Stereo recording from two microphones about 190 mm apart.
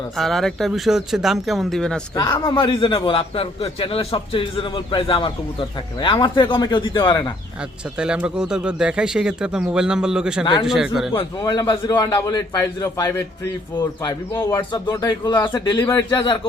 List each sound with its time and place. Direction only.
0.2 s speech: centre (ahead or behind)
2.1 s a man's voice: 25° left (ahead or behind)
7.9 s speech: 5° right (ahead or behind)
11.2 s a man's voice: 20° left (ahead or behind)